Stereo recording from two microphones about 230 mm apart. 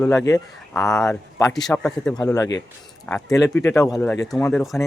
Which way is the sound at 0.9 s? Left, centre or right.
Centre.